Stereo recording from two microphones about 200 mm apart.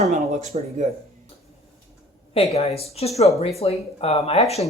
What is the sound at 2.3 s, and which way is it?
Speech, 30° left (ahead or behind).